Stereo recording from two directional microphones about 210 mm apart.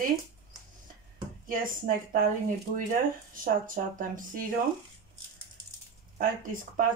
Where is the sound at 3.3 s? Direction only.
40° right (ahead or behind).